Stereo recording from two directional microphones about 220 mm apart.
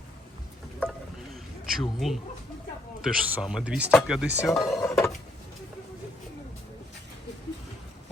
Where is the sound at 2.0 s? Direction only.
Centre (ahead or behind).